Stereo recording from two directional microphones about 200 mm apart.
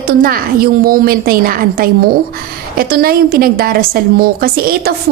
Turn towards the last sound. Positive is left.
turn(degrees=-50)  # may be behind; listen again after turning